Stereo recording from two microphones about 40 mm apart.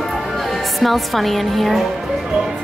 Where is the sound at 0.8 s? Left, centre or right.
Centre.